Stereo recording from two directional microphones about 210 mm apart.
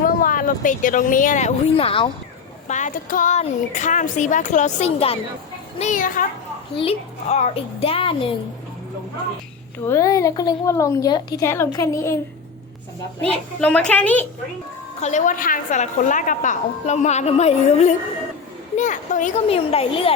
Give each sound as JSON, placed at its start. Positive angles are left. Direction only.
{"t": 0.0, "sound": "a woman's voice", "side_deg": 40}
{"t": 9.8, "sound": "a woman's voice", "side_deg": 15}
{"t": 13.6, "sound": "a woman's voice", "side_deg": 5}
{"t": 15.0, "sound": "a woman's voice", "side_deg": 35}